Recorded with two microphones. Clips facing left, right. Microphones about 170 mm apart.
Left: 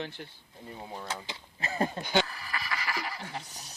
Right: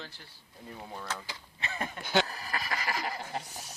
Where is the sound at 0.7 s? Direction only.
20° left (ahead or behind).